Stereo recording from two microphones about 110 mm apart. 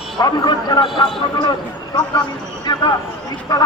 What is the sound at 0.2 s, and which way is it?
Speech, 40° left (ahead or behind).